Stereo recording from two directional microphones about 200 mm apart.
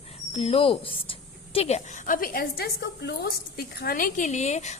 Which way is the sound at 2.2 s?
45° left (ahead or behind).